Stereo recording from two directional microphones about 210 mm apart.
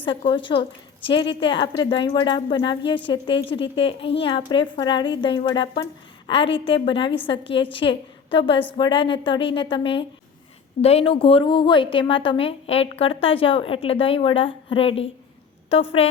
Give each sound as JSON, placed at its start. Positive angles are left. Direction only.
{"t": 0.0, "sound": "a woman's voice", "side_deg": 25}